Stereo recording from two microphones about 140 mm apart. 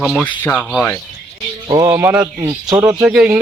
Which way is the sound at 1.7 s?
25° right (ahead or behind).